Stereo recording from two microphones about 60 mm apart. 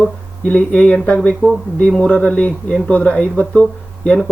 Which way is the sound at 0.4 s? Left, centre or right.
Left.